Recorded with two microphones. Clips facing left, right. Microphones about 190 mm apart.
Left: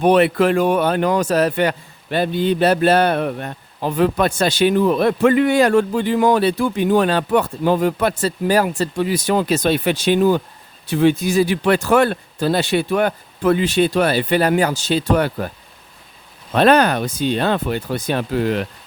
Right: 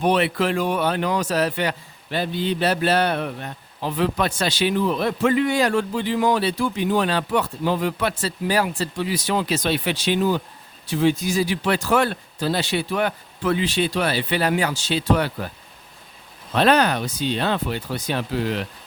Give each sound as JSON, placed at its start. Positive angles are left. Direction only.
{"t": 0.0, "sound": "a man's voice", "side_deg": 50}
{"t": 16.6, "sound": "a man's voice", "side_deg": 50}